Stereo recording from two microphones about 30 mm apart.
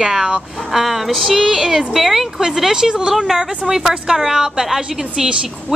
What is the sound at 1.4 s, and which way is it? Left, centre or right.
Speech, right.